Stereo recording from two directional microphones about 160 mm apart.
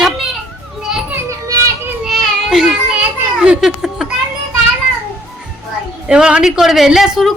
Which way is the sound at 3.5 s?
5° right (ahead or behind).